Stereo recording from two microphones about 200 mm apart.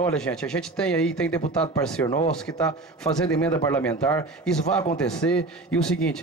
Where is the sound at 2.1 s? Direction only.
30° left (ahead or behind).